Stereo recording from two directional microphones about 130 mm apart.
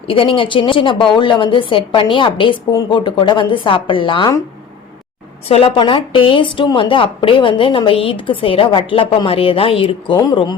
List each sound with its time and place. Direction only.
0.1 s speech: 40° left (ahead or behind)
5.5 s speech: 45° left (ahead or behind)
10.2 s speech: 30° left (ahead or behind)